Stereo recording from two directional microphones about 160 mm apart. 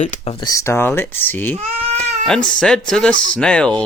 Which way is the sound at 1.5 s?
40° right (ahead or behind).